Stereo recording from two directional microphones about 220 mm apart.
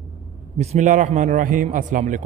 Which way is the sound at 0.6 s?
35° right (ahead or behind).